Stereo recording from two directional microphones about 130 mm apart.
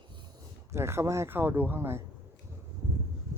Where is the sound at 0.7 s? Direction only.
20° right (ahead or behind).